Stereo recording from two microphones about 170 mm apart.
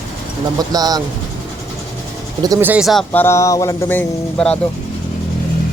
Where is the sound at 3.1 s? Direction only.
15° left (ahead or behind).